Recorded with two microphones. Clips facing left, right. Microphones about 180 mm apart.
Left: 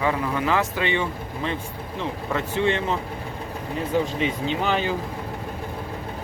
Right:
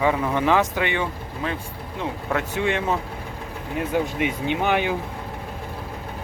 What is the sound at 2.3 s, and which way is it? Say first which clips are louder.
Speech: left 1 dB; 10° right (ahead or behind).